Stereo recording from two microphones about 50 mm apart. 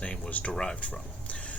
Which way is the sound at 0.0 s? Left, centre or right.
Left.